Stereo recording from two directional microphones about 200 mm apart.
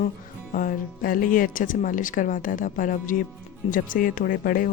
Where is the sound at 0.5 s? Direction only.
45° left (ahead or behind).